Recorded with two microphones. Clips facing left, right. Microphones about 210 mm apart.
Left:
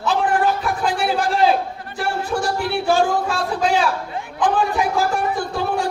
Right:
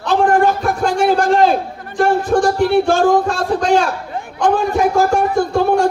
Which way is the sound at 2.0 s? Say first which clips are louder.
Right 9 dB; 45° right (ahead or behind).